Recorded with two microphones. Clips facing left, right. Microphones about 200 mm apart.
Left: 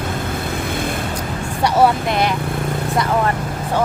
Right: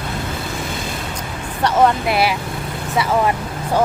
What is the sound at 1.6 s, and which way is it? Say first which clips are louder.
Speech: even; 10° left (ahead or behind).